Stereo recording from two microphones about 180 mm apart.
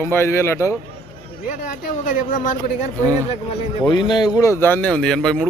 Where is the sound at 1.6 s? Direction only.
45° left (ahead or behind).